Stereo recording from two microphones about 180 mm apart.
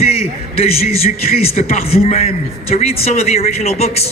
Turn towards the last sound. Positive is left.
turn(degrees=35)  # may be behind; listen again after turning